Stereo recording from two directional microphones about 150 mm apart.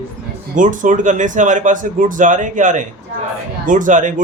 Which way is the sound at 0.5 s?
60° right (ahead or behind).